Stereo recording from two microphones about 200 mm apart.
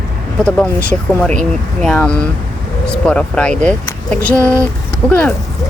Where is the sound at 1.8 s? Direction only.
5° left (ahead or behind).